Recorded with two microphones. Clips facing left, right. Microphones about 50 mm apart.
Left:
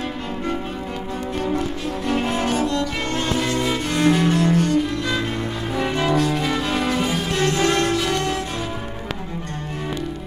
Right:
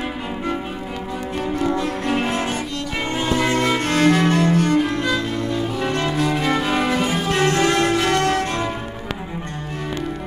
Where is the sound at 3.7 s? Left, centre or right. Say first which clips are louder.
Even; right.